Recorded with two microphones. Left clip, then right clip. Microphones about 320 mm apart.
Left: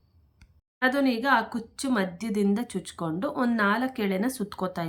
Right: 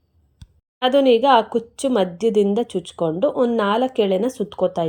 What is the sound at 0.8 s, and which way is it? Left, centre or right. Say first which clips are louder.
Speech: right 8 dB; centre.